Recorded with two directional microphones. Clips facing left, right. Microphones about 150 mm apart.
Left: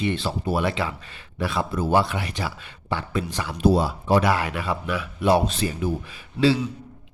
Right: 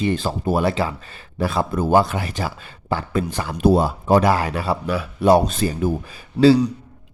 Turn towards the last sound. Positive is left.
turn(degrees=-40)  # may be behind; listen again after turning